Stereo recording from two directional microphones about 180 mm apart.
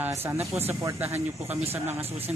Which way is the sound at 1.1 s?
35° right (ahead or behind).